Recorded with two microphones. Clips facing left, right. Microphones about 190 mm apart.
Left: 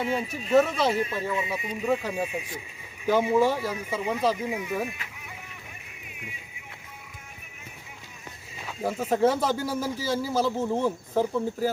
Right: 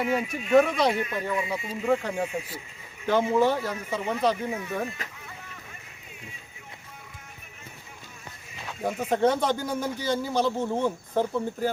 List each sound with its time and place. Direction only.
0.2 s speech: 35° left (ahead or behind); by 4.9 s 15° left (ahead or behind)
8.6 s speech: 5° left (ahead or behind)